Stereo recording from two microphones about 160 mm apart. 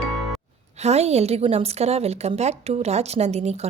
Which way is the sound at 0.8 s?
40° right (ahead or behind).